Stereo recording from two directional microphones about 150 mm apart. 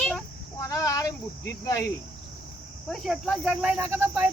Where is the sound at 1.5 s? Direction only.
20° left (ahead or behind).